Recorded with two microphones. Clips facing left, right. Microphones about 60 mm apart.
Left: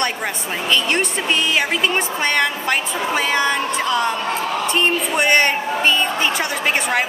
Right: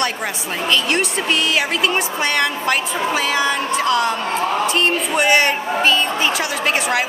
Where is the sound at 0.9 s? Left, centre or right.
Centre.